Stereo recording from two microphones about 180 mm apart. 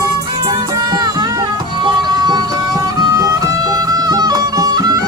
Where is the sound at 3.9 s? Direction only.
20° right (ahead or behind).